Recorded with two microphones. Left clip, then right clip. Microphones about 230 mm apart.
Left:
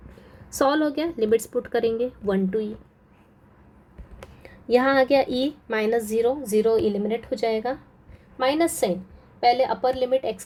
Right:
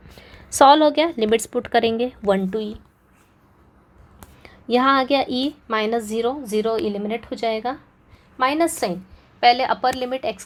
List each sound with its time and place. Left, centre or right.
0.6 s a woman's voice: centre
4.4 s a woman's voice: centre